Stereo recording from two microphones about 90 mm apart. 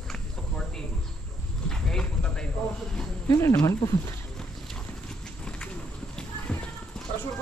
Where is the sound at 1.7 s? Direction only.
10° left (ahead or behind).